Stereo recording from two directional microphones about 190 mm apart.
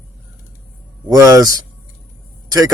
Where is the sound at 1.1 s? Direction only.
15° right (ahead or behind).